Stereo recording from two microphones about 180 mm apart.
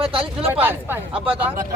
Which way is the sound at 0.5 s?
10° right (ahead or behind).